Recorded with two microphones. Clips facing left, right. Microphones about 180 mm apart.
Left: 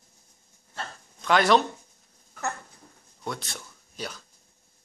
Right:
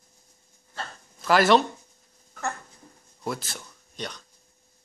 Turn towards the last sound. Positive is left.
turn(degrees=5)  # may be behind; listen again after turning